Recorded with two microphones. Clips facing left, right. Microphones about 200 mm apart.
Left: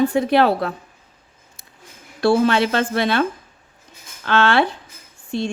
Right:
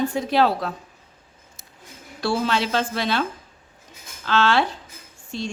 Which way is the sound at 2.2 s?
55° left (ahead or behind).